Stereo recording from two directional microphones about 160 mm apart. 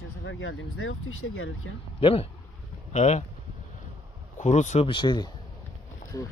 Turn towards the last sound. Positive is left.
turn(degrees=30)  # may be behind; listen again after turning